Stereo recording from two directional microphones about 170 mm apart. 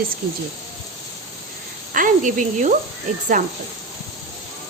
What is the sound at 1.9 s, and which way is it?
Speech, 50° right (ahead or behind).